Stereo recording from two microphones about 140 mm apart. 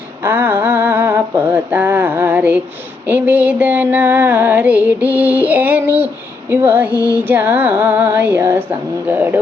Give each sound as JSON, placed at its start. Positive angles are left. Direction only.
{"t": 0.2, "sound": "music", "side_deg": -15}